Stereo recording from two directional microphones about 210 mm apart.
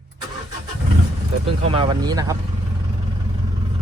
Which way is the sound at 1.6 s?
25° right (ahead or behind).